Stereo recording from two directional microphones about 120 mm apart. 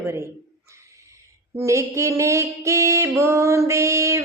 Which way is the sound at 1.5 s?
25° right (ahead or behind).